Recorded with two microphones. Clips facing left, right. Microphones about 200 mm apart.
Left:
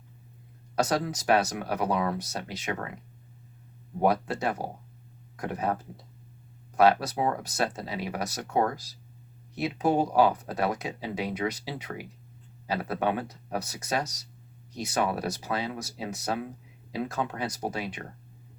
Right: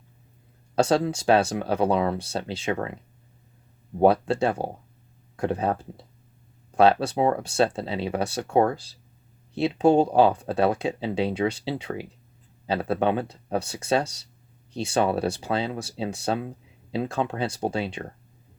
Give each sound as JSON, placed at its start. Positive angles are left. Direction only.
{"t": 0.8, "sound": "speech", "side_deg": -30}
{"t": 4.0, "sound": "speech", "side_deg": -30}